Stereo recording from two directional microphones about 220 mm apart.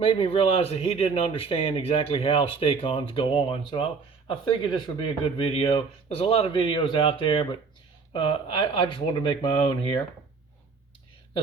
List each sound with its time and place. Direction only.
0.0 s speech: 25° left (ahead or behind)